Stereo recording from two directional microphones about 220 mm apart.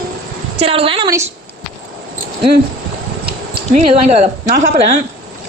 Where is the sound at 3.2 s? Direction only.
45° right (ahead or behind).